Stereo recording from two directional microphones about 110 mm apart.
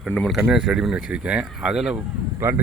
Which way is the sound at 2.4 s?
20° right (ahead or behind).